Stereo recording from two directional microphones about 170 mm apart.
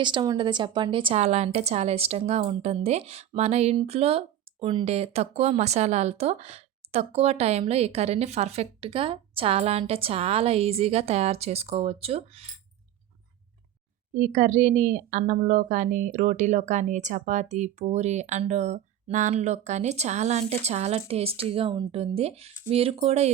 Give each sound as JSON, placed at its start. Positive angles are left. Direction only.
{"t": 0.0, "sound": "speech", "side_deg": -25}
{"t": 14.1, "sound": "a woman's voice", "side_deg": -45}